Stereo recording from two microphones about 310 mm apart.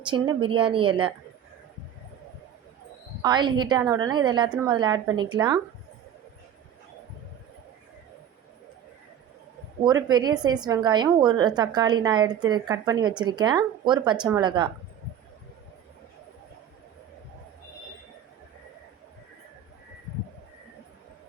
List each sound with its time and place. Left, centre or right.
0.0 s a woman's voice: centre
3.2 s a woman's voice: centre
9.8 s a woman's voice: centre